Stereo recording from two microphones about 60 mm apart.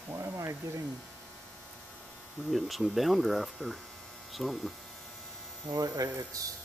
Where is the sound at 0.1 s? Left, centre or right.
Right.